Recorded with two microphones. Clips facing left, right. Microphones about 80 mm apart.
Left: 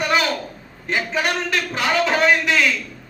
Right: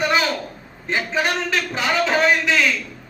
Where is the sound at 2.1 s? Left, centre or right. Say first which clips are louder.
Right 1 dB; centre.